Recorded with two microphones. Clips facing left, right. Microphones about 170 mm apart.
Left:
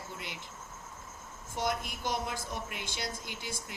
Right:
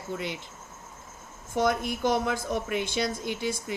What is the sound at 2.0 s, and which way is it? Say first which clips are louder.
Speech: right 9 dB; 70° right (ahead or behind).